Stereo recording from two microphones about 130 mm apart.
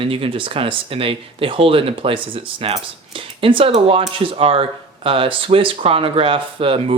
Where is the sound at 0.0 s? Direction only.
45° right (ahead or behind).